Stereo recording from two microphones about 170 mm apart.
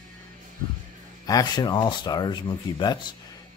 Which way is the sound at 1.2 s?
20° left (ahead or behind).